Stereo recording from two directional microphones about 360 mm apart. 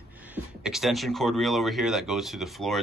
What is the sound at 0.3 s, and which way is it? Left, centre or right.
Speech, centre.